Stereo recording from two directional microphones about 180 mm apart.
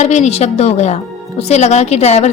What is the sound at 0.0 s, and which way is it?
A woman's voice, 40° left (ahead or behind).